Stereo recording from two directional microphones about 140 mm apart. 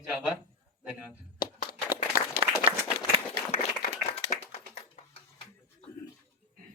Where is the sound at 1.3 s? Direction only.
90° left.